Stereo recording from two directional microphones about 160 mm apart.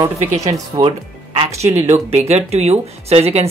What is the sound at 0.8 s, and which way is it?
Speech, 25° right (ahead or behind).